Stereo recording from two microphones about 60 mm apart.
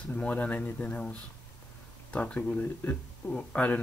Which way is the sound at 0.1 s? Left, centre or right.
Left.